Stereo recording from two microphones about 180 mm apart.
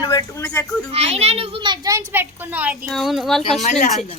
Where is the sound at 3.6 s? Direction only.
40° left (ahead or behind).